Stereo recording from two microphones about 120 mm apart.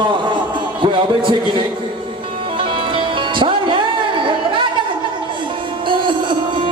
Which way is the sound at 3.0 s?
45° right (ahead or behind).